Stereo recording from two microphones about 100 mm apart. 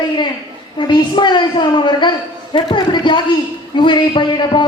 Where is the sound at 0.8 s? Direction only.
50° left (ahead or behind).